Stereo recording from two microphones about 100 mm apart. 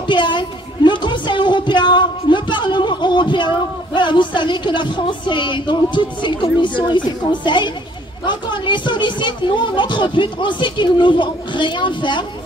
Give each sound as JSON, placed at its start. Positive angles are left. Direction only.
{"t": 0.0, "sound": "music", "side_deg": 50}
{"t": 7.4, "sound": "speech", "side_deg": 50}